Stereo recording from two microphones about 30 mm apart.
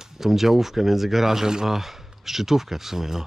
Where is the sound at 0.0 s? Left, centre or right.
Centre.